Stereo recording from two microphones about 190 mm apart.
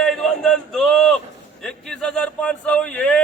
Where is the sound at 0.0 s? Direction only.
Centre (ahead or behind).